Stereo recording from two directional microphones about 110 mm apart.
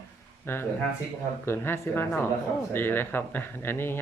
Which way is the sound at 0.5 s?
20° left (ahead or behind).